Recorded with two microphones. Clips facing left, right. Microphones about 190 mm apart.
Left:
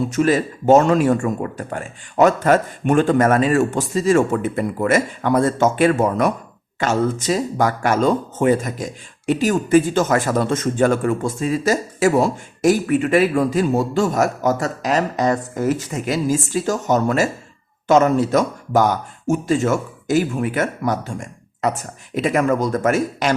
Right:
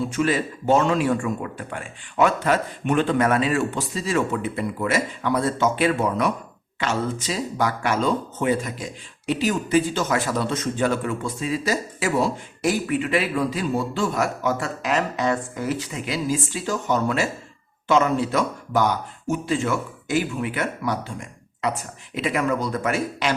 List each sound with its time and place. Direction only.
0.1 s speech: 45° left (ahead or behind)